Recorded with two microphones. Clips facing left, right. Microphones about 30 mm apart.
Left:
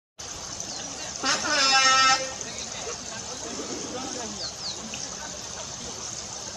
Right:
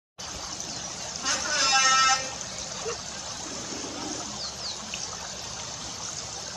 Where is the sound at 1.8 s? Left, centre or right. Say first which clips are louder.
Left 1 dB; centre.